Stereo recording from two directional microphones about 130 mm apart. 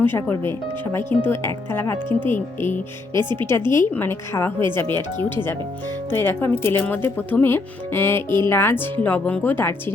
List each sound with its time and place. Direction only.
0.0 s speech: 15° left (ahead or behind)
3.2 s speech: 35° right (ahead or behind)
3.7 s speech: 20° left (ahead or behind)
6.1 s speech: 15° left (ahead or behind)